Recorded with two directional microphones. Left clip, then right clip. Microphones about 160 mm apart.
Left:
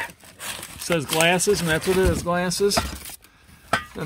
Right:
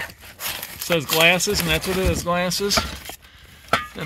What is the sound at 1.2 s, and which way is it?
Speech, 20° left (ahead or behind).